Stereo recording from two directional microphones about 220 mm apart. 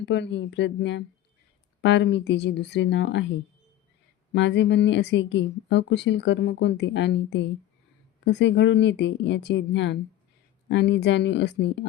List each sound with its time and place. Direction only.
0.0 s speech: 55° left (ahead or behind)
4.4 s speech: 55° left (ahead or behind)